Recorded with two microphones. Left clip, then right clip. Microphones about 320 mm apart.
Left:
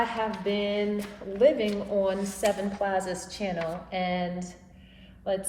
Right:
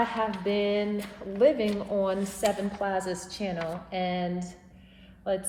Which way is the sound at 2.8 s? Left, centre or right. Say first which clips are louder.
Left 2 dB; right.